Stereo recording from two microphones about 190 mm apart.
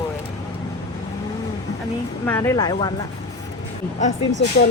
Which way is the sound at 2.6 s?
25° left (ahead or behind).